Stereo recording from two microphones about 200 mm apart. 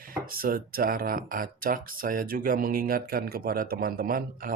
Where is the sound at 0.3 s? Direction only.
45° right (ahead or behind).